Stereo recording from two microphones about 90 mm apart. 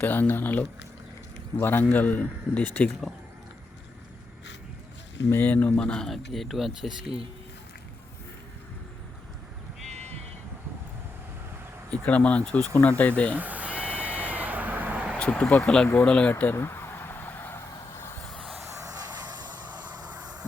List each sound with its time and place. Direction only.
0.0 s a man's voice: 20° left (ahead or behind)
5.3 s speech: 20° left (ahead or behind); by 7.2 s centre (ahead or behind)
11.9 s speech: 15° left (ahead or behind)
13.3 s bleat: 15° right (ahead or behind)
15.2 s speech: 10° left (ahead or behind)
16.3 s vehicle: 25° left (ahead or behind)
18.3 s vehicle: 10° left (ahead or behind)
18.9 s vehicle: 45° right (ahead or behind)